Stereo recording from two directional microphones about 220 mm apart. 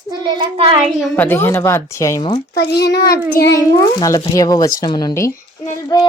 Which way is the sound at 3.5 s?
15° left (ahead or behind).